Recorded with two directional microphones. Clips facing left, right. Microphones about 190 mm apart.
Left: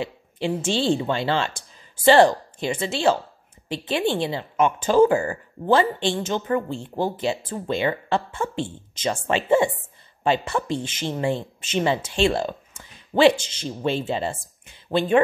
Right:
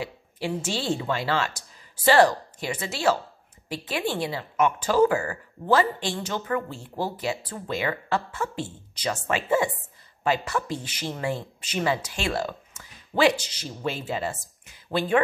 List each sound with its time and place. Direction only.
0.0 s speech: 25° left (ahead or behind)